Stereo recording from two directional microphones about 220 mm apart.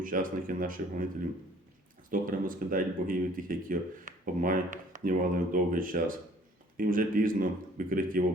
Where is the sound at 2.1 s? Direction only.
40° right (ahead or behind).